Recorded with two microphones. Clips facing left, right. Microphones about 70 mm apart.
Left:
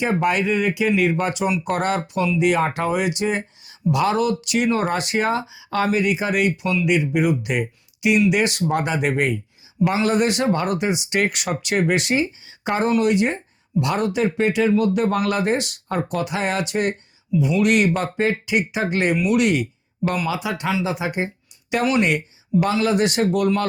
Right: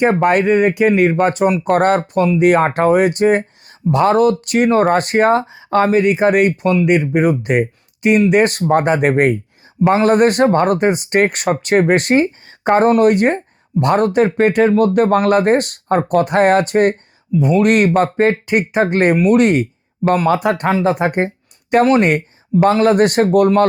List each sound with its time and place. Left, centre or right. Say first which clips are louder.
0.0 s speech: right 7 dB; right